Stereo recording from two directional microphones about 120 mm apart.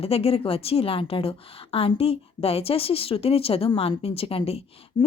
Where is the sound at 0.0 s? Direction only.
55° left (ahead or behind).